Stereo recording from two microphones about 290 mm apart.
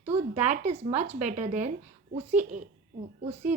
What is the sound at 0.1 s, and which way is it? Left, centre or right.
A woman's voice, right.